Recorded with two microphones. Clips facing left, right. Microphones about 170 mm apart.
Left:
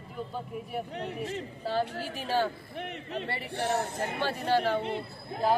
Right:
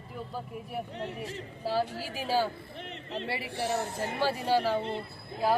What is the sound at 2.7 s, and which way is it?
Speech, 60° left (ahead or behind).